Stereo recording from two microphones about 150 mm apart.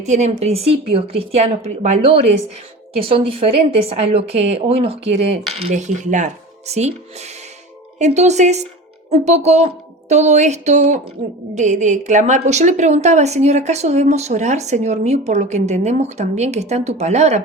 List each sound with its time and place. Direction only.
0.0 s a woman's voice: 50° right (ahead or behind)
7.9 s a woman's voice: 50° right (ahead or behind)